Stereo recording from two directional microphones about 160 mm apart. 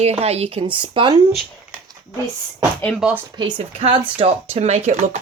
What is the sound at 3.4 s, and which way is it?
Speech, 30° right (ahead or behind).